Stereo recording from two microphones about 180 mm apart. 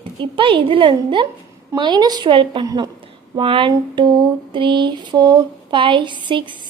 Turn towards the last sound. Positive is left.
turn(degrees=-25)  # may be behind; listen again after turning